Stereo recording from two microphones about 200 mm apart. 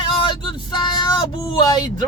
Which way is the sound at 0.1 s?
25° left (ahead or behind).